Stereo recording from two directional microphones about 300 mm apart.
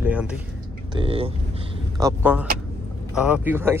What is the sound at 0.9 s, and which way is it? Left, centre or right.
Speech, centre.